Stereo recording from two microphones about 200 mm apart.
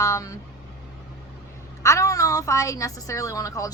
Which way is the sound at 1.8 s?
15° left (ahead or behind).